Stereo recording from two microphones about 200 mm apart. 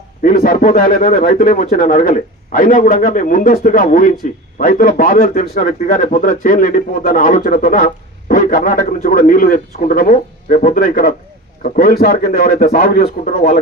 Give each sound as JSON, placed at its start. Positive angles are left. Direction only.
{"t": 0.2, "sound": "a man's voice", "side_deg": 40}